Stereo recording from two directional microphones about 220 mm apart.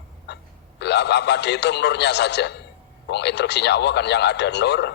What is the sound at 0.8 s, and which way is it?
A man's voice, 50° left (ahead or behind).